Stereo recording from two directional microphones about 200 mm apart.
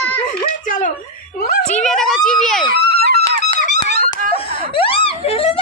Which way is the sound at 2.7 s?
50° right (ahead or behind).